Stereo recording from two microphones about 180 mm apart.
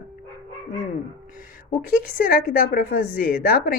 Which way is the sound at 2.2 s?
50° left (ahead or behind).